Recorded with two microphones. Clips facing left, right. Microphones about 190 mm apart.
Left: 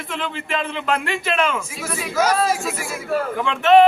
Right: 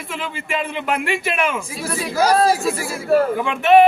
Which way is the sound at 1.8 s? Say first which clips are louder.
Right 2 dB; 35° right (ahead or behind).